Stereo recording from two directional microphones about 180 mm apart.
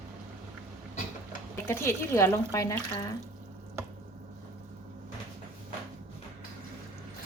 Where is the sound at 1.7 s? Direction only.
15° left (ahead or behind).